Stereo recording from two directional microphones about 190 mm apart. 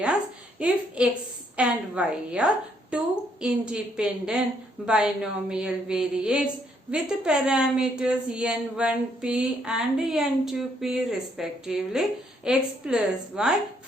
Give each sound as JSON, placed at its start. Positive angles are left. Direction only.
{"t": 1.0, "sound": "a woman's voice", "side_deg": -5}